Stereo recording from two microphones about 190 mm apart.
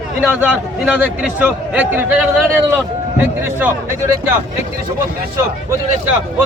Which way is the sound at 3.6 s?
10° right (ahead or behind).